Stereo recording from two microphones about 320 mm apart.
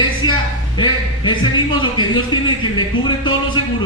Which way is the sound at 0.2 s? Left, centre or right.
Centre.